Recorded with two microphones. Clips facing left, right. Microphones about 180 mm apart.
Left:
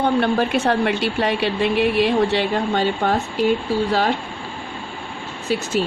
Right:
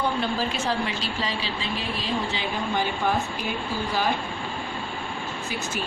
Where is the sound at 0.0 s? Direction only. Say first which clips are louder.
Left 8 dB; 65° left (ahead or behind).